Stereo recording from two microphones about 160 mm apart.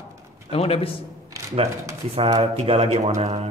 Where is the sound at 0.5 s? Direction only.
40° left (ahead or behind).